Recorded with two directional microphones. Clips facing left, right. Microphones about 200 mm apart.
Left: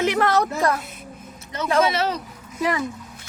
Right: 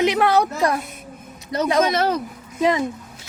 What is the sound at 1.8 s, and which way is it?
Speech, 50° right (ahead or behind).